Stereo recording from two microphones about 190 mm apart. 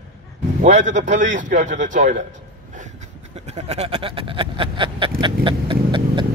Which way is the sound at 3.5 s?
35° right (ahead or behind).